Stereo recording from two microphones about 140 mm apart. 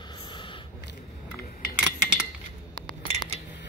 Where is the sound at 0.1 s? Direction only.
35° left (ahead or behind).